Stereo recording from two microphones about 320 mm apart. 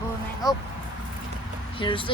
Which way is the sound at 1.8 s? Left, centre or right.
Centre.